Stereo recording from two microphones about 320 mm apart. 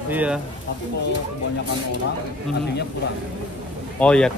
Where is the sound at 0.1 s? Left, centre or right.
Centre.